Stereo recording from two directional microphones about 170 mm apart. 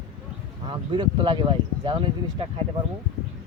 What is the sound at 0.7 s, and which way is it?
Speech, 30° right (ahead or behind).